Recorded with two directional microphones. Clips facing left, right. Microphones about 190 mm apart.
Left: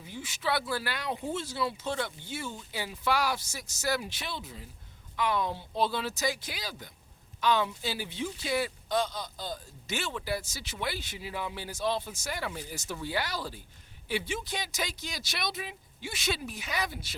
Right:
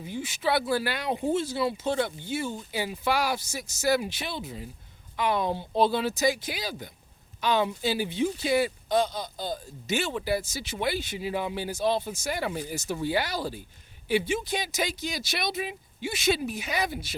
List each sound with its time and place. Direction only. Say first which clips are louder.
0.0 s speech: right 6 dB; 15° right (ahead or behind)